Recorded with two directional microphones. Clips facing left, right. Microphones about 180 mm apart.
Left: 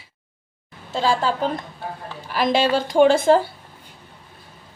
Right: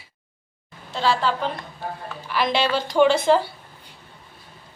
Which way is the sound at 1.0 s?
45° left (ahead or behind).